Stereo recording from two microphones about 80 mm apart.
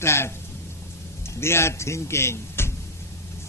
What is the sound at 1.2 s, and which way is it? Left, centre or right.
A man's voice, left.